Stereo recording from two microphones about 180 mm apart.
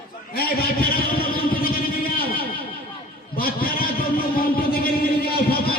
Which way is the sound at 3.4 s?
55° left (ahead or behind).